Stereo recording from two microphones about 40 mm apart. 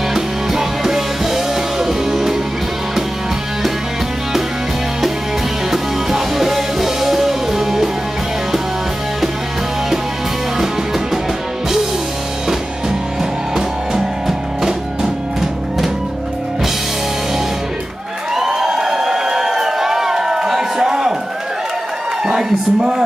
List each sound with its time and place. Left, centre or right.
0.1 s music: centre
5.7 s music: centre
13.6 s music: centre
18.3 s crowd: centre
22.2 s a sound: centre